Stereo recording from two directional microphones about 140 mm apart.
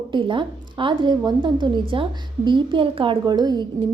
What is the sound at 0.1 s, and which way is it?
A woman's voice, 35° right (ahead or behind).